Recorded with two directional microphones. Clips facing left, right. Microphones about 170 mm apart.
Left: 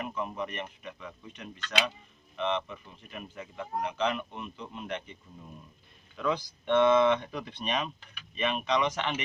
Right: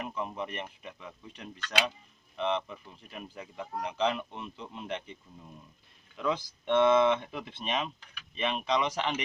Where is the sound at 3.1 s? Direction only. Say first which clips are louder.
Left 1 dB; 30° right (ahead or behind).